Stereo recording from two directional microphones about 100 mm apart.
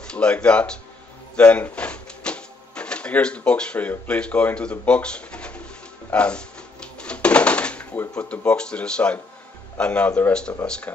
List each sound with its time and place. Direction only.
0.0 s speech: 10° left (ahead or behind)
6.0 s a sound: 10° left (ahead or behind)
8.1 s speech: 10° left (ahead or behind)